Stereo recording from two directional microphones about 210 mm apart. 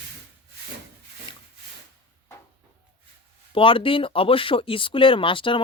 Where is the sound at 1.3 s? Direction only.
20° left (ahead or behind).